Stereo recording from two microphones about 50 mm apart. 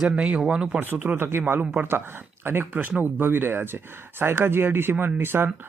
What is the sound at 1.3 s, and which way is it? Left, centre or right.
Speech, right.